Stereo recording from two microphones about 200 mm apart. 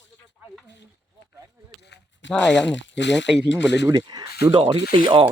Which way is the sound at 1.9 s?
65° left (ahead or behind).